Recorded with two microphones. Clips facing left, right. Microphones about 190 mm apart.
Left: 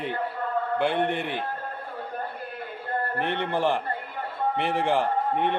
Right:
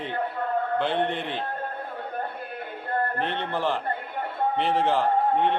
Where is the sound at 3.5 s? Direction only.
15° left (ahead or behind).